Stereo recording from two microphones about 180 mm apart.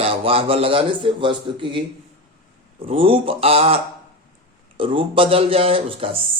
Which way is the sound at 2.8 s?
30° right (ahead or behind).